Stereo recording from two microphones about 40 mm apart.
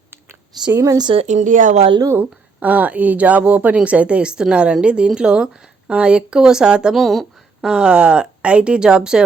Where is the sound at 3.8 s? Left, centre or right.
Right.